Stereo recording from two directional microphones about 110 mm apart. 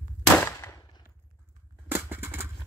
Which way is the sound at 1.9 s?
15° right (ahead or behind).